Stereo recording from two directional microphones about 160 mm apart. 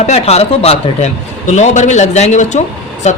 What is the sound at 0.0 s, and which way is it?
Speech, 40° left (ahead or behind).